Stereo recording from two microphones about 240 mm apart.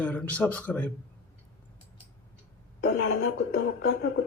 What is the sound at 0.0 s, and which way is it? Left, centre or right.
Speech, centre.